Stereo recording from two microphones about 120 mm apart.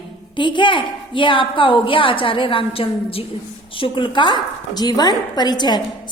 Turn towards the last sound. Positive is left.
turn(degrees=35)  # may be behind; listen again after turning